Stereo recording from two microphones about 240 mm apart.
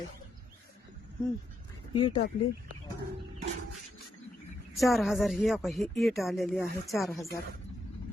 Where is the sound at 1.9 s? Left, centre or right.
Left.